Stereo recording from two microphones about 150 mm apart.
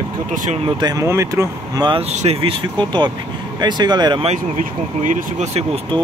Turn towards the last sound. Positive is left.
turn(degrees=-45)  # may be behind; listen again after turning